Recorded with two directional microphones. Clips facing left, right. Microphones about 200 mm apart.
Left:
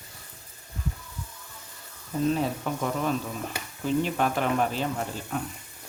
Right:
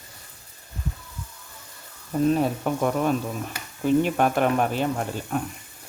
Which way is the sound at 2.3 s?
55° right (ahead or behind).